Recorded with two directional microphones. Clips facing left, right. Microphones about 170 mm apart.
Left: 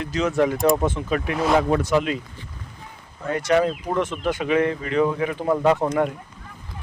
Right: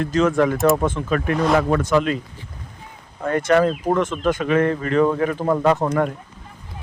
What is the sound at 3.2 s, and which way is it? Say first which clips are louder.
Speech: right 3 dB; 50° right (ahead or behind).